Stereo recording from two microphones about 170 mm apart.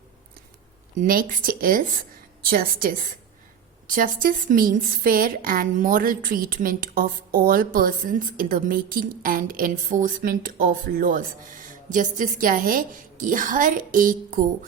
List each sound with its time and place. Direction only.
0.9 s a woman's voice: 55° right (ahead or behind)